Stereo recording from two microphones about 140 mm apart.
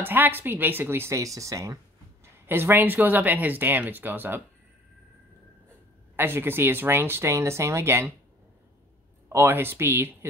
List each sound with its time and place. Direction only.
0.0 s speech: 15° right (ahead or behind)
6.1 s speech: 15° right (ahead or behind)
9.3 s speech: 15° right (ahead or behind)